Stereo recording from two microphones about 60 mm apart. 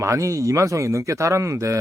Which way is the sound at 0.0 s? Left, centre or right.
Right.